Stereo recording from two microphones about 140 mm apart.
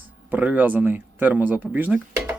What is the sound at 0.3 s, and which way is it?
Speech, 10° right (ahead or behind).